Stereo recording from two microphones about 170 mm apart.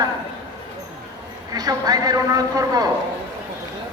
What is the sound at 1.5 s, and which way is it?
A man's voice, 20° right (ahead or behind).